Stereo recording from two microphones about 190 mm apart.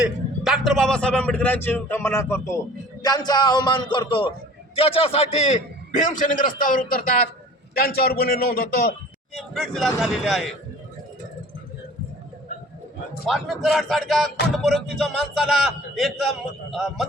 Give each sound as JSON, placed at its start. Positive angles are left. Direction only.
{"t": 0.4, "sound": "a man's voice", "side_deg": 0}
{"t": 9.3, "sound": "a man's voice", "side_deg": 0}
{"t": 13.2, "sound": "a man's voice", "side_deg": 0}